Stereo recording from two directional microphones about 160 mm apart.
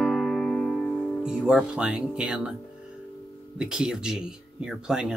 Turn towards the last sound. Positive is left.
turn(degrees=-5)  # may be behind; listen again after turning